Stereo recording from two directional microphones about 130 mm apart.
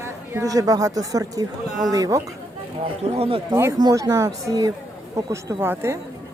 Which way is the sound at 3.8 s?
25° right (ahead or behind).